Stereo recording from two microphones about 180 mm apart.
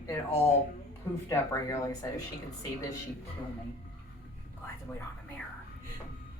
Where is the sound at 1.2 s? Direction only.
15° left (ahead or behind).